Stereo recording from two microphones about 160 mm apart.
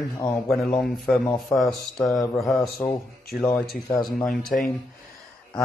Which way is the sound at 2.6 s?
20° left (ahead or behind).